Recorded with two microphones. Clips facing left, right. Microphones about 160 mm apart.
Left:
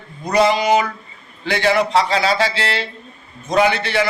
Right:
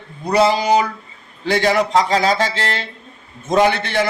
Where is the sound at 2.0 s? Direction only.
45° right (ahead or behind).